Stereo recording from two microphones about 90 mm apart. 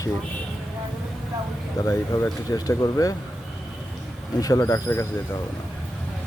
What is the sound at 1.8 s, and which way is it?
Speech, 35° left (ahead or behind).